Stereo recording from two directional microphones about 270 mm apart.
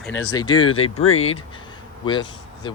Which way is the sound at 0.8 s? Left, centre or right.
Left.